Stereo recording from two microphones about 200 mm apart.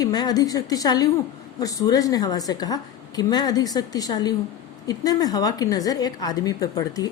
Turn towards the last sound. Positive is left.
turn(degrees=20)  # may be behind; listen again after turning